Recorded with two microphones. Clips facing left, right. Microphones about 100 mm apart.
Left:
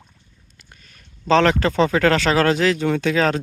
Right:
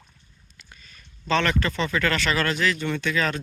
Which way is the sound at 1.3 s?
90° left.